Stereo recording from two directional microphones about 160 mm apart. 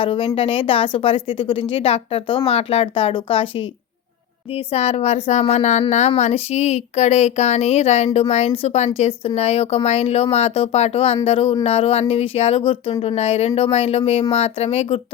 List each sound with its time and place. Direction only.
0.0 s speech: 35° left (ahead or behind)
4.7 s a woman's voice: 40° left (ahead or behind)